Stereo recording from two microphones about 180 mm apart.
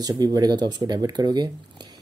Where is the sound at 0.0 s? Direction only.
20° right (ahead or behind).